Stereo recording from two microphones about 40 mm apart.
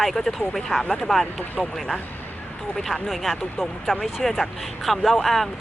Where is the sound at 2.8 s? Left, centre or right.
Centre.